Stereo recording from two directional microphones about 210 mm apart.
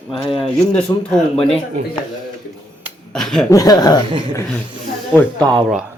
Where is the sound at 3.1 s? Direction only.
Centre (ahead or behind).